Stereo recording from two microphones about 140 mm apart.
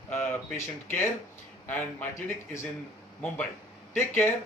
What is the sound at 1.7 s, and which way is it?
Speech, 15° left (ahead or behind).